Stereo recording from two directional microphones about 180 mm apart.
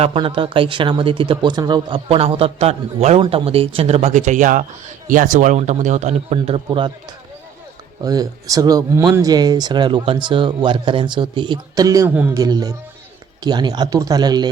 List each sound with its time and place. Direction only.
0.0 s speech: 30° right (ahead or behind)
8.0 s speech: 20° right (ahead or behind)